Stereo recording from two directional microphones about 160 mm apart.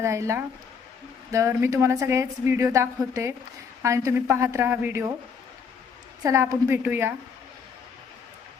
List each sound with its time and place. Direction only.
0.0 s a woman's voice: 20° right (ahead or behind)
6.2 s a woman's voice: 20° right (ahead or behind)